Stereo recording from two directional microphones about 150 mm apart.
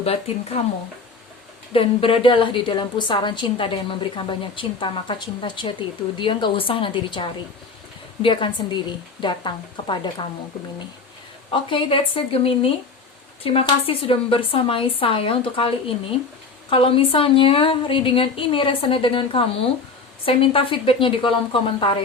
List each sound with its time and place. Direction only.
0.0 s speech: 40° left (ahead or behind)
1.7 s a woman's voice: 40° left (ahead or behind)
11.5 s a woman's voice: 35° left (ahead or behind)